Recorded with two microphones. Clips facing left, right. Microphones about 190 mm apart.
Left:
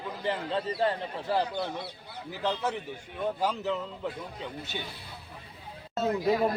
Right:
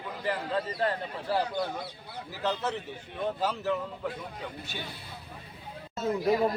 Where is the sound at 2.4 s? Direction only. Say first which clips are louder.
Even; 10° left (ahead or behind).